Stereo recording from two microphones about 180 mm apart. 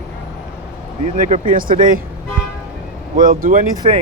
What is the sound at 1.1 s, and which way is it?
Speech, 45° right (ahead or behind).